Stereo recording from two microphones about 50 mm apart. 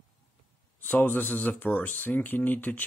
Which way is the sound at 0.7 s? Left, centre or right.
Left.